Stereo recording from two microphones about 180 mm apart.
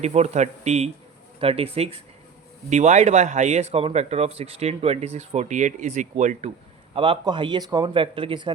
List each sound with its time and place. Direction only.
0.0 s speech: 40° right (ahead or behind)
6.9 s speech: 30° right (ahead or behind)